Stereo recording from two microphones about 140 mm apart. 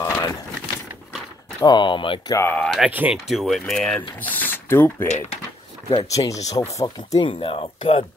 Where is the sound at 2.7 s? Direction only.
10° right (ahead or behind); by 5.0 s 15° left (ahead or behind).